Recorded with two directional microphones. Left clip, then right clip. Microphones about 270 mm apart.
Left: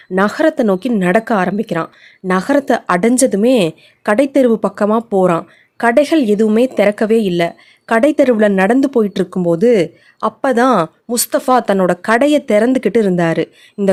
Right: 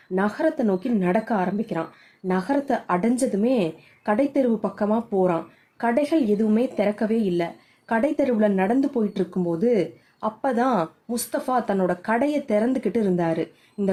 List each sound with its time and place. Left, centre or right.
0.1 s speech: left